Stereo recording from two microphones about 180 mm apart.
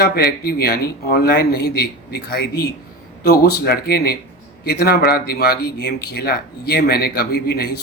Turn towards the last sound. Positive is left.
turn(degrees=60)  # may be behind; listen again after turning